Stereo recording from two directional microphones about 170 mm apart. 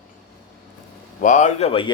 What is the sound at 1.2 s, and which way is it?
Speech, 45° left (ahead or behind).